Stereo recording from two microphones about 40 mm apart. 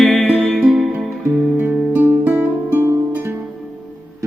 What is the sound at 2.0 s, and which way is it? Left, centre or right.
Music, right.